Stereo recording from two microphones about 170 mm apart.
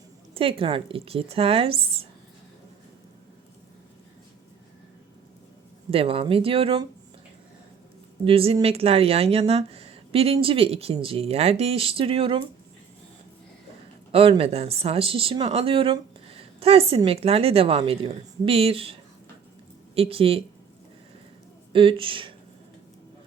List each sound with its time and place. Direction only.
0.3 s speech: 35° right (ahead or behind)
5.9 s speech: 35° right (ahead or behind)
8.2 s speech: 35° right (ahead or behind)
14.1 s speech: 35° right (ahead or behind)
20.0 s speech: 35° right (ahead or behind)
21.7 s speech: 30° right (ahead or behind)